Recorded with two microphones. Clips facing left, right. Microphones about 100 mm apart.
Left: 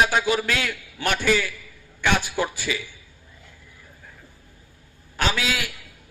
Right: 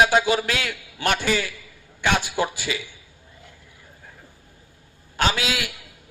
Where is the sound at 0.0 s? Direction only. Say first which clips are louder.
Right 2 dB; 20° right (ahead or behind).